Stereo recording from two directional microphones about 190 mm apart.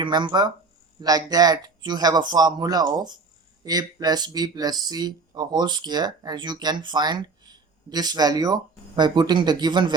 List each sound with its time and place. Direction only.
0.0 s speech: 25° right (ahead or behind)